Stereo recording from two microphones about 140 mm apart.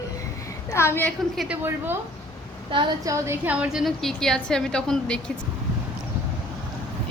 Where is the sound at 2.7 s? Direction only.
35° right (ahead or behind).